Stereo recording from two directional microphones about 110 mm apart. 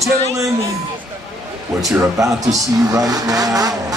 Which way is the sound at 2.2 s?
30° right (ahead or behind).